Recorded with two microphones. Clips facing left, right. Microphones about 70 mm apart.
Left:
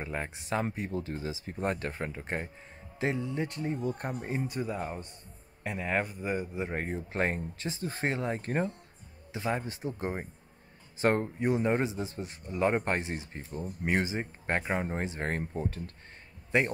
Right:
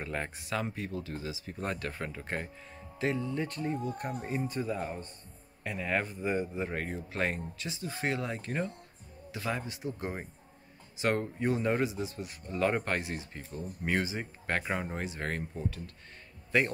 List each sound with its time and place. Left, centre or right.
0.0 s speech: centre
0.4 s speech: left
4.5 s speech: centre
5.6 s speech: left
6.0 s speech: centre
6.7 s speech: left
9.3 s speech: left
16.5 s speech: left